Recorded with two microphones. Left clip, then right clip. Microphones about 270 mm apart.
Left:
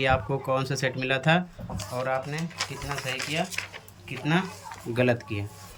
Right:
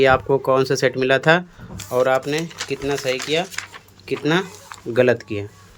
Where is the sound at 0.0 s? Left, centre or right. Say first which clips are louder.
Right 10 dB; centre.